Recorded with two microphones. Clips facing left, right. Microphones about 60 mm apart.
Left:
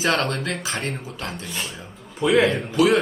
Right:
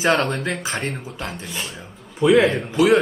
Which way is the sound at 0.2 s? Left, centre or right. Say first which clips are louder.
Right 2 dB; centre.